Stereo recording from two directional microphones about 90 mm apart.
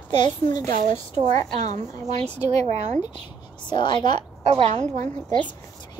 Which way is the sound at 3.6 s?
55° left (ahead or behind).